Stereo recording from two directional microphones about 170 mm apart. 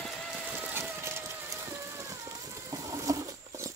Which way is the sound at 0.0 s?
Centre (ahead or behind).